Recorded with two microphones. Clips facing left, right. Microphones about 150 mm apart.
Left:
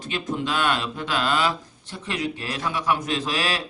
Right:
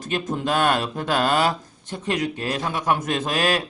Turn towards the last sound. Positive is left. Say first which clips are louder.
# right 4 dB
turn(degrees=-50)  # may be behind; listen again after turning